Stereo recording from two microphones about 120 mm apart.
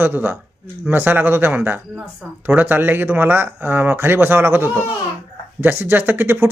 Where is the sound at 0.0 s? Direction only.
15° right (ahead or behind).